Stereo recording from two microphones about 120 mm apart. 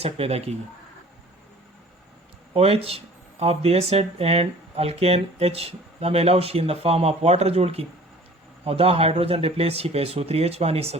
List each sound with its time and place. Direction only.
0.0 s speech: 60° right (ahead or behind)
2.5 s speech: 55° right (ahead or behind)